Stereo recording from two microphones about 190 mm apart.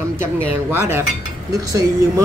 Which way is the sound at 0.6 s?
15° right (ahead or behind).